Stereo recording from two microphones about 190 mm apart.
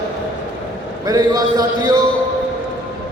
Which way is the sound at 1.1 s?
20° right (ahead or behind).